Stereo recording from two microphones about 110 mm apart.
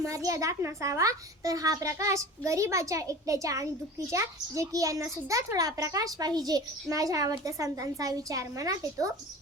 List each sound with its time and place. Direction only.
0.0 s a child's voice: 30° right (ahead or behind)